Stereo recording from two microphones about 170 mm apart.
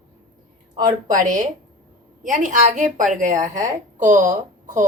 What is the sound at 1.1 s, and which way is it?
A woman's voice, 45° right (ahead or behind).